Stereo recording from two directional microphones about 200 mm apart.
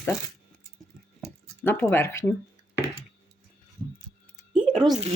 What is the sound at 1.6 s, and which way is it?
Speech, 10° left (ahead or behind).